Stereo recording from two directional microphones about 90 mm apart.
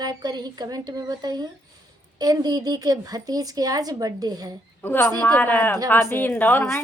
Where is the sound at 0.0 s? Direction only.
50° right (ahead or behind).